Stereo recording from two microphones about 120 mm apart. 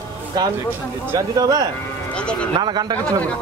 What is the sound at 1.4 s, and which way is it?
Speech, 30° right (ahead or behind).